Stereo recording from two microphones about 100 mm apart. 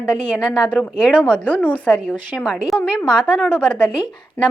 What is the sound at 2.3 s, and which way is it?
A woman's voice, 5° right (ahead or behind).